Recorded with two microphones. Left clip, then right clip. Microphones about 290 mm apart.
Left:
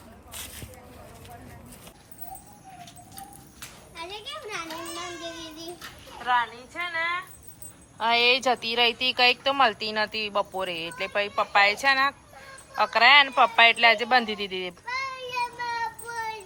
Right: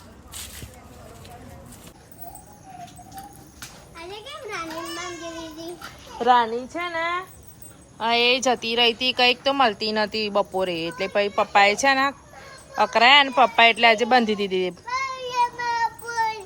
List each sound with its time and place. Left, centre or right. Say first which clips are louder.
6.2 s speech: right 7 dB; centre
14.8 s child singing: right 4 dB; right